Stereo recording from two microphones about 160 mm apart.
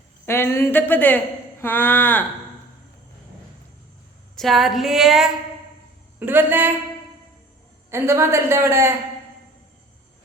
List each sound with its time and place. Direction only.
0.3 s speech: 15° left (ahead or behind)
4.4 s female singing: centre (ahead or behind)
6.1 s a woman's voice: 10° right (ahead or behind)
7.9 s a woman's voice: 15° right (ahead or behind)